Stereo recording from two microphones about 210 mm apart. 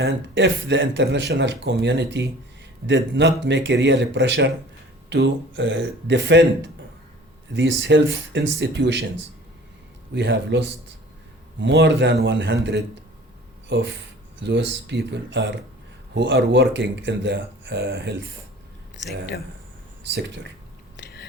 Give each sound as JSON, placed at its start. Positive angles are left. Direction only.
{"t": 0.0, "sound": "speech", "side_deg": -55}
{"t": 10.2, "sound": "speech", "side_deg": -55}
{"t": 13.7, "sound": "speech", "side_deg": -55}
{"t": 20.1, "sound": "speech", "side_deg": -55}
{"t": 20.9, "sound": "a sound", "side_deg": 50}